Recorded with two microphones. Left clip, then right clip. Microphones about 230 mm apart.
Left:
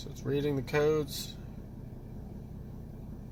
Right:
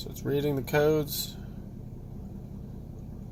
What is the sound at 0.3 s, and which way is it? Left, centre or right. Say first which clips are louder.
Speech: right 3 dB; right.